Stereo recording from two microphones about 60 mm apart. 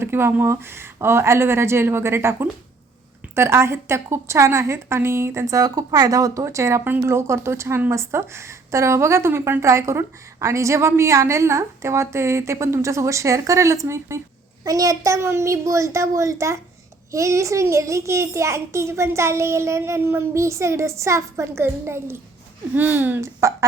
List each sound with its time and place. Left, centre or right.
0.0 s a woman's voice: right
5.5 s speech: right
6.4 s a child's voice: right
14.6 s a child's voice: right
22.7 s speech: right
23.2 s a child's voice: right